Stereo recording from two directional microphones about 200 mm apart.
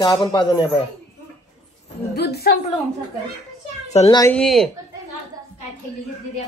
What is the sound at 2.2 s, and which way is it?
Speech, 50° left (ahead or behind).